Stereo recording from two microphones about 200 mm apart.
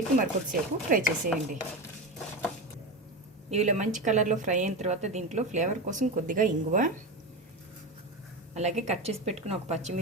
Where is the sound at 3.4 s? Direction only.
35° right (ahead or behind).